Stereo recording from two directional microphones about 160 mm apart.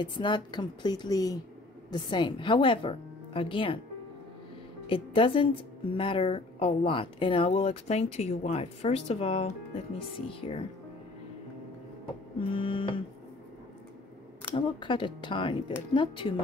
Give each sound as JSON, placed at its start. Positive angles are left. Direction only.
{"t": 0.0, "sound": "a woman's voice", "side_deg": 30}
{"t": 4.8, "sound": "a woman's voice", "side_deg": 30}
{"t": 12.4, "sound": "a woman's voice", "side_deg": 35}
{"t": 14.5, "sound": "a woman's voice", "side_deg": 30}